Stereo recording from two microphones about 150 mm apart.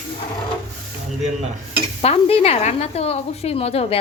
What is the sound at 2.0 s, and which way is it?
A woman's voice, 40° left (ahead or behind).